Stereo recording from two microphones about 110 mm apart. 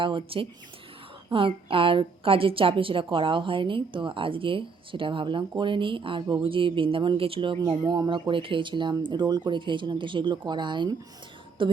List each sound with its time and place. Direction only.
0.0 s a woman's voice: 50° right (ahead or behind)
7.9 s a woman's voice: 40° right (ahead or behind)